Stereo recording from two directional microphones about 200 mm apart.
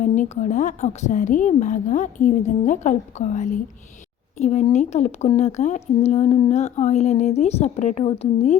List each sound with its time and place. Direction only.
0.0 s a woman's voice: 40° left (ahead or behind)